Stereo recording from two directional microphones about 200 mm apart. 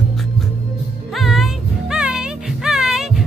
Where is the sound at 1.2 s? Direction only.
Centre (ahead or behind).